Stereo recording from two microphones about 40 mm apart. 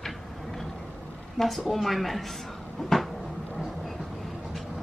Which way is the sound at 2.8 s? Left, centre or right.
Centre.